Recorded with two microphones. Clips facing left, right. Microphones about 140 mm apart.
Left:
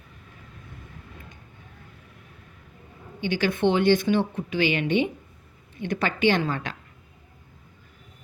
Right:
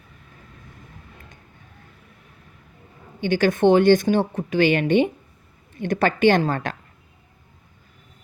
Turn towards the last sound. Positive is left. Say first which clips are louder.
# right 5 dB
turn(degrees=-45)  # may be behind; listen again after turning